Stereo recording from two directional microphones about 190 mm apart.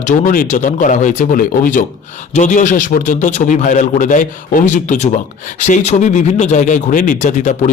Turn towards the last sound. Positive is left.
turn(degrees=40)  # may be behind; listen again after turning